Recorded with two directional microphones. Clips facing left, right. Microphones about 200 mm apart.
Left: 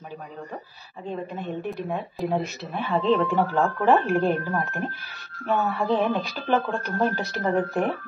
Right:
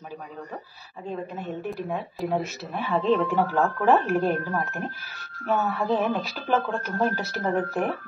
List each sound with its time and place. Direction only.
1.0 s speech: 5° right (ahead or behind)